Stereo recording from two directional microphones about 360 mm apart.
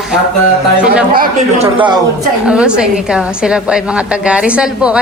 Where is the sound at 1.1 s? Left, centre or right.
Right.